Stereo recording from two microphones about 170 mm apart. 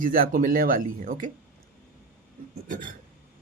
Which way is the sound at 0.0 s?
55° right (ahead or behind).